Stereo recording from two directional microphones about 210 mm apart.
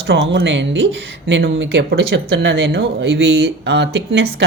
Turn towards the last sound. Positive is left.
turn(degrees=-55)  # may be behind; listen again after turning